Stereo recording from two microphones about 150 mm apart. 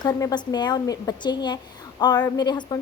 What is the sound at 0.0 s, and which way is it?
A woman's voice, 25° left (ahead or behind).